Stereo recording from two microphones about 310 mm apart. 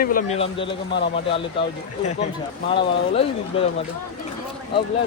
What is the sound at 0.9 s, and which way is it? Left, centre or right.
Speech, left.